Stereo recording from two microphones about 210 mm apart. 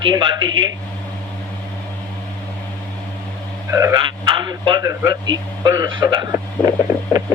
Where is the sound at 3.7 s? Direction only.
15° right (ahead or behind).